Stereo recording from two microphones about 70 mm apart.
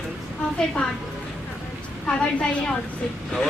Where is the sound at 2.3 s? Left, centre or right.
Centre.